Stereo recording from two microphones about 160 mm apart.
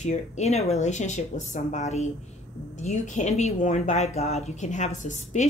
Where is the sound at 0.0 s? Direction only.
45° left (ahead or behind).